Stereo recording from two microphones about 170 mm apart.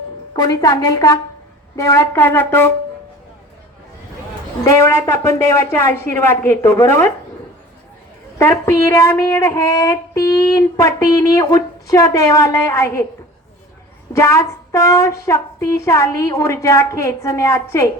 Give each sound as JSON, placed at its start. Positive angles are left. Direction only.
{"t": 0.3, "sound": "speech", "side_deg": 20}
{"t": 4.6, "sound": "speech", "side_deg": 15}
{"t": 8.4, "sound": "speech", "side_deg": 15}
{"t": 14.1, "sound": "speech", "side_deg": 20}